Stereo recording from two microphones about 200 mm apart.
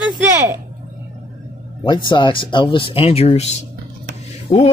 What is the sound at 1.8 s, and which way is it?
Speech, 20° left (ahead or behind).